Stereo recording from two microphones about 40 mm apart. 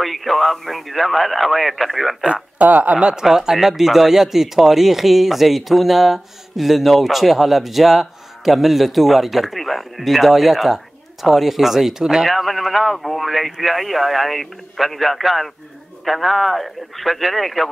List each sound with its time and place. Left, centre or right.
0.0 s speech: centre
2.6 s speech: right
3.0 s speech: right
12.3 s speech: centre